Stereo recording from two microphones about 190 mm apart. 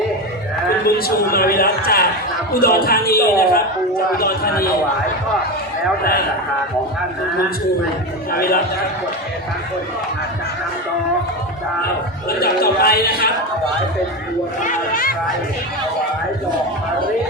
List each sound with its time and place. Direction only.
0.9 s a man's voice: 50° left (ahead or behind)
6.0 s a man's voice: 50° left (ahead or behind)
8.3 s a man's voice: 50° left (ahead or behind)
12.4 s a man's voice: 55° left (ahead or behind)
14.6 s a man's voice: 45° left (ahead or behind)